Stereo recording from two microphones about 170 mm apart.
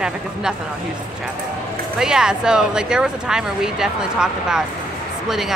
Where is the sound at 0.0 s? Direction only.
5° right (ahead or behind).